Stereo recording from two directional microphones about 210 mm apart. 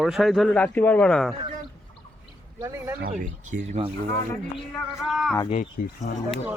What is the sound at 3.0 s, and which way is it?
Speech, 45° right (ahead or behind).